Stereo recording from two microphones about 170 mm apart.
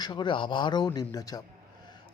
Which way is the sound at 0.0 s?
25° left (ahead or behind).